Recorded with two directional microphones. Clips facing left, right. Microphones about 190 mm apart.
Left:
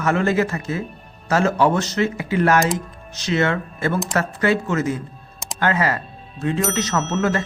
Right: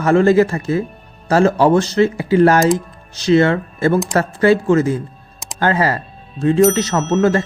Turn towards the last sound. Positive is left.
turn(degrees=-35)  # may be behind; listen again after turning